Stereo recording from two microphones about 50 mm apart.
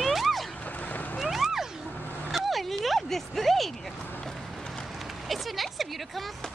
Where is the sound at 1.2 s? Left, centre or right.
Centre.